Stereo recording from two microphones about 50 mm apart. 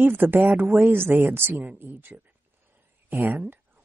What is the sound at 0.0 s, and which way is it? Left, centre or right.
Speech, right.